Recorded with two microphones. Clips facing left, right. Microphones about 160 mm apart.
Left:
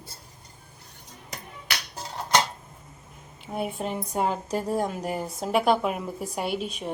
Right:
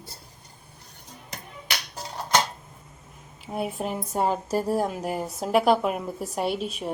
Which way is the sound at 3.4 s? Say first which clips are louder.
Right 1 dB; centre (ahead or behind).